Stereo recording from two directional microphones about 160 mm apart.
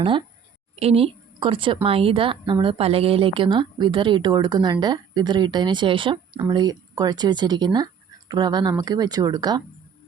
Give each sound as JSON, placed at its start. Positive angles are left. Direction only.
{"t": 0.0, "sound": "a woman's voice", "side_deg": -30}